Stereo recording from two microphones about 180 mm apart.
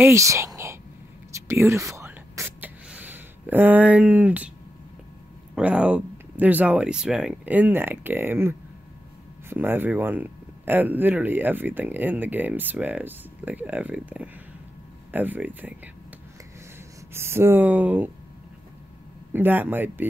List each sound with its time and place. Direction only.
0.0 s speech: 15° right (ahead or behind)
1.5 s whispering: 15° right (ahead or behind)
5.5 s speech: 5° right (ahead or behind)
17.1 s speech: 15° right (ahead or behind)
19.3 s speech: 10° right (ahead or behind)